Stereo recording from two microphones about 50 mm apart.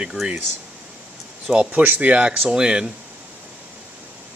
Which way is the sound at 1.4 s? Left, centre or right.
Centre.